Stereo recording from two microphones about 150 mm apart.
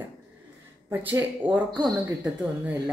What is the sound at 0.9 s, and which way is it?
A woman's voice, 10° right (ahead or behind).